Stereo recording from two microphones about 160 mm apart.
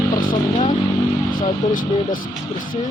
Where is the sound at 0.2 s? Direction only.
60° left (ahead or behind).